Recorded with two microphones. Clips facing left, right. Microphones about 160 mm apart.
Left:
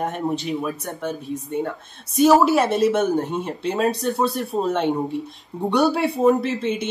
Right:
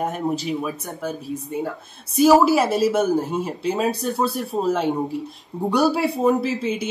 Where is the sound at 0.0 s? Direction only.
Centre (ahead or behind).